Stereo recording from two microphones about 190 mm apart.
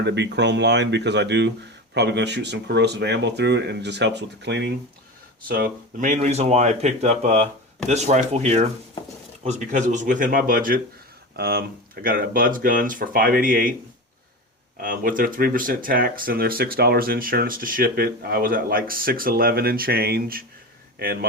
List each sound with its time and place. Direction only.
0.0 s speech: 65° right (ahead or behind)
5.5 s speech: 50° right (ahead or behind)
14.8 s speech: 45° right (ahead or behind)